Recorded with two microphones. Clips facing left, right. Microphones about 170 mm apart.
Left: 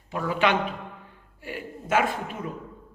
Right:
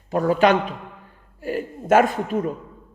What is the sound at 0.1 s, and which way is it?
A man's voice, 40° right (ahead or behind).